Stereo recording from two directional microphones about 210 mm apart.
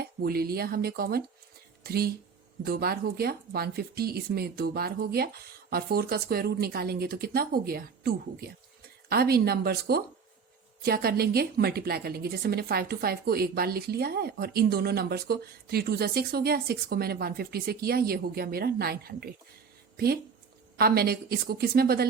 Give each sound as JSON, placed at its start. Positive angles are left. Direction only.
{"t": 0.0, "sound": "a woman's voice", "side_deg": -45}
{"t": 20.7, "sound": "a woman's voice", "side_deg": -45}